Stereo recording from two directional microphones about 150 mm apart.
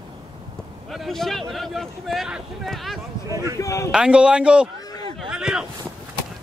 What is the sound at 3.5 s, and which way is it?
Speech, 20° left (ahead or behind).